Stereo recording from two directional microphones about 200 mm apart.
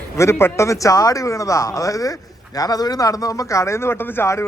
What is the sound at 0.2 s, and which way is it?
Speech, 15° left (ahead or behind).